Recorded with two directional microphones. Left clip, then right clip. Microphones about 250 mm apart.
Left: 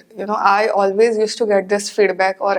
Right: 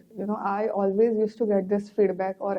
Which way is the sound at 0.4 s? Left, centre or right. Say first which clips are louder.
Left 12 dB; centre.